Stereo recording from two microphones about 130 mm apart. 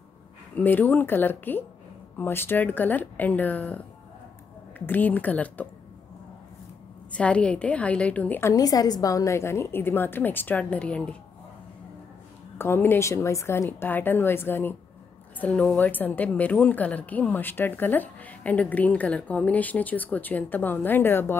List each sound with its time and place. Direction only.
0.6 s a woman's voice: 15° left (ahead or behind)
7.1 s a woman's voice: 10° left (ahead or behind)
12.5 s a woman's voice: 20° left (ahead or behind)